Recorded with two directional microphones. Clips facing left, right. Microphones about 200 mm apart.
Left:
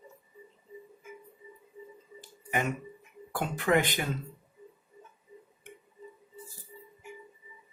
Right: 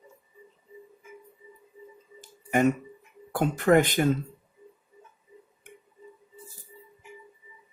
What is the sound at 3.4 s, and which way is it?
Speech, 45° right (ahead or behind).